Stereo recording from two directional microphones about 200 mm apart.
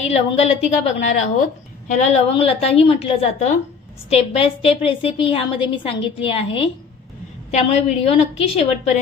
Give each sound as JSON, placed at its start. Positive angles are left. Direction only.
{"t": 0.0, "sound": "a woman's voice", "side_deg": 30}